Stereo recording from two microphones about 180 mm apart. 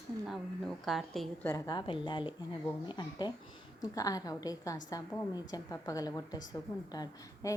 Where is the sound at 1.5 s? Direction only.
20° left (ahead or behind).